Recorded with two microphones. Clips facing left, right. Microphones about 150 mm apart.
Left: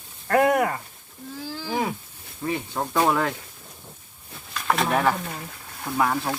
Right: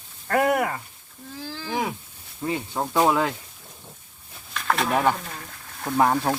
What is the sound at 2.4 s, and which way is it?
Speech, 10° right (ahead or behind).